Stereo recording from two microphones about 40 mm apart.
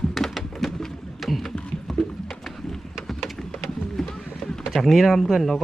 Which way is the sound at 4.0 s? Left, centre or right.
Centre.